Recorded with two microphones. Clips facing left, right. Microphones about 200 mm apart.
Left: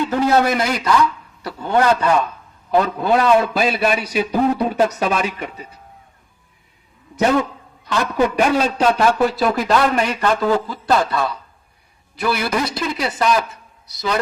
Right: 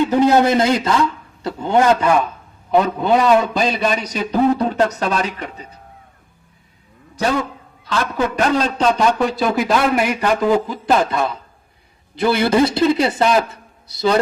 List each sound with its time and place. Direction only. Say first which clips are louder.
0.0 s a man's voice: right 3 dB; 20° right (ahead or behind)
2.0 s a man's voice: right 1 dB; 10° right (ahead or behind); by 5.5 s 10° left (ahead or behind)
8.0 s a man's voice: left 2 dB; 10° left (ahead or behind); by 14.2 s 30° right (ahead or behind)